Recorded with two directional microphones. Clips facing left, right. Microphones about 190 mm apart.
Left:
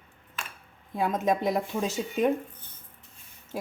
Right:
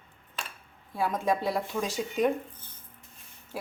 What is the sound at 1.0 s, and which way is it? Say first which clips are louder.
Speech: left 2 dB; 20° left (ahead or behind).